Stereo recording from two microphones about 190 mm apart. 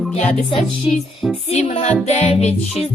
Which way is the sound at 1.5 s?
35° left (ahead or behind).